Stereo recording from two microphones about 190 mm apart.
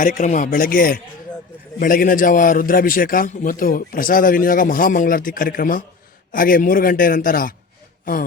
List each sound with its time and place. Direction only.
0.0 s a man's voice: 40° left (ahead or behind)